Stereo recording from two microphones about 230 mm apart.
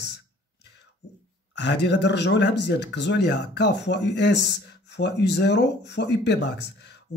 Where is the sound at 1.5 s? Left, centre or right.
Left.